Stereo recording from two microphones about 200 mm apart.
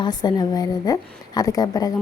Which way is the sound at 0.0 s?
20° left (ahead or behind).